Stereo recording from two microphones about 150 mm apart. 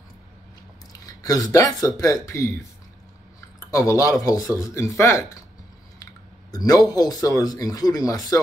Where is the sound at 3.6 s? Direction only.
20° left (ahead or behind).